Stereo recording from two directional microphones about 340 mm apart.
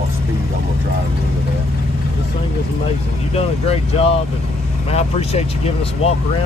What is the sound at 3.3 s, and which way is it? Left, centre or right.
Speech, centre.